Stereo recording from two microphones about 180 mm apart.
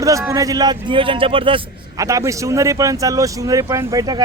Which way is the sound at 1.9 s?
15° right (ahead or behind).